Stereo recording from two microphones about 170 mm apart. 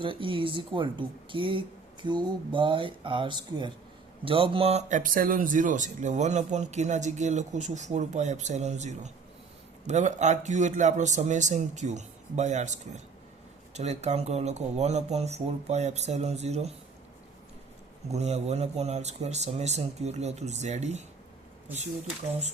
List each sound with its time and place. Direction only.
0.0 s speech: 30° right (ahead or behind)
18.1 s speech: 40° right (ahead or behind)